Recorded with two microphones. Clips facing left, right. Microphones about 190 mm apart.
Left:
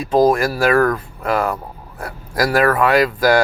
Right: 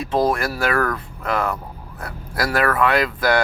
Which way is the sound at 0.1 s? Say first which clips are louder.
Left 6 dB; 35° left (ahead or behind).